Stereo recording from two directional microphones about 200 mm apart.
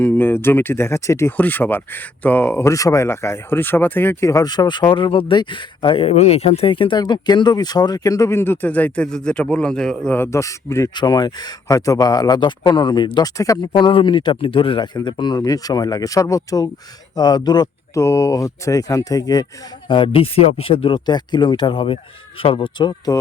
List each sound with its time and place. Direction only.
0.0 s speech: 10° left (ahead or behind)